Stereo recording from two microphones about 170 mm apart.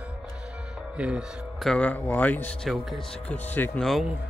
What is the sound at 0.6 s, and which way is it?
Speech, 5° right (ahead or behind).